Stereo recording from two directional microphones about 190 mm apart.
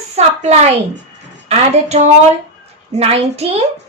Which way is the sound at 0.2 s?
35° right (ahead or behind).